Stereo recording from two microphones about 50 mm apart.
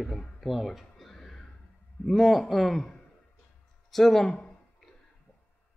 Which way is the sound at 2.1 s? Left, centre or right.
Centre.